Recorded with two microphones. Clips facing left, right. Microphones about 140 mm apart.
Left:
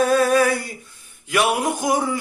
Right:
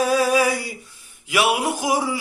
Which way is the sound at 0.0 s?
10° right (ahead or behind).